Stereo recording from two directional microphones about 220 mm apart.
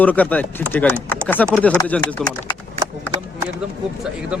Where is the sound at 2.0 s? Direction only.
20° left (ahead or behind).